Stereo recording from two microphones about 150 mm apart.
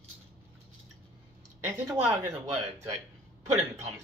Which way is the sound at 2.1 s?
15° right (ahead or behind).